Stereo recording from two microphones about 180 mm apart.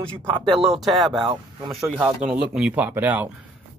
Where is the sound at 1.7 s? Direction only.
5° right (ahead or behind).